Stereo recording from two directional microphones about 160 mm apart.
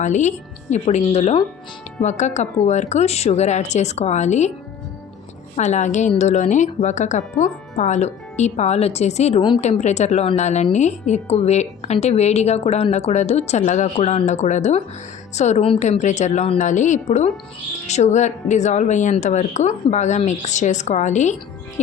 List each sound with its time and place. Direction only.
0.0 s a woman's voice: 50° left (ahead or behind)
5.5 s a woman's voice: 45° left (ahead or behind)